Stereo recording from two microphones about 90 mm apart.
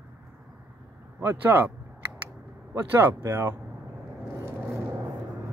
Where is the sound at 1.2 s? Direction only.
25° right (ahead or behind).